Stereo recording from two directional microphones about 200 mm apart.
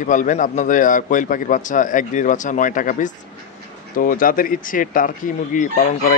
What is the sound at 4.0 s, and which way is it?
Chicken, 45° left (ahead or behind).